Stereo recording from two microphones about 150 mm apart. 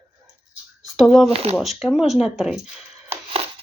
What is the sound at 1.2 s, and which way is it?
Speech, 45° right (ahead or behind).